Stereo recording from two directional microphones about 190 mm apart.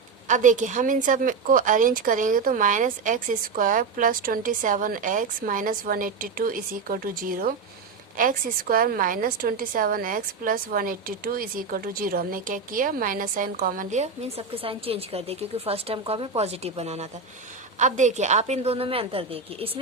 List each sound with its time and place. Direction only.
0.3 s a woman's voice: 40° right (ahead or behind)